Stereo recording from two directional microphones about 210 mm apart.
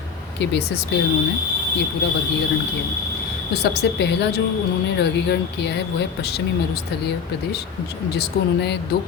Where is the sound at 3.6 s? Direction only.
55° left (ahead or behind).